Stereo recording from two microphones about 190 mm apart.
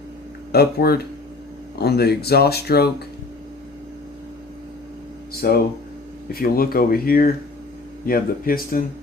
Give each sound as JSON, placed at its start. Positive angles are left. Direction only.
{"t": 0.5, "sound": "speech", "side_deg": 55}
{"t": 5.3, "sound": "a sound", "side_deg": 55}
{"t": 6.3, "sound": "speech", "side_deg": 50}